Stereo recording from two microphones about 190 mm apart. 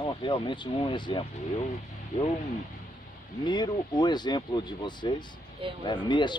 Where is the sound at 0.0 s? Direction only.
25° left (ahead or behind).